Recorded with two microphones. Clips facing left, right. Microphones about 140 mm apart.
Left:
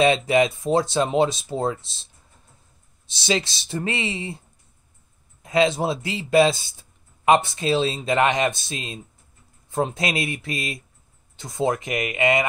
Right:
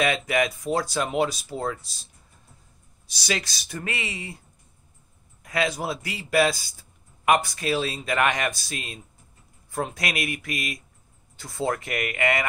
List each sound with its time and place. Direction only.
0.0 s speech: 25° left (ahead or behind)
3.1 s speech: 25° left (ahead or behind)
5.4 s speech: 25° left (ahead or behind)